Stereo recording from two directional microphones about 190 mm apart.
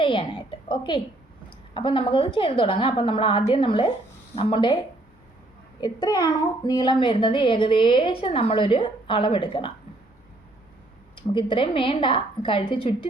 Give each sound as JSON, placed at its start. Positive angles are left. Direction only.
{"t": 0.0, "sound": "a child's voice", "side_deg": 25}
{"t": 5.8, "sound": "a child's voice", "side_deg": 20}
{"t": 11.1, "sound": "a child's voice", "side_deg": 25}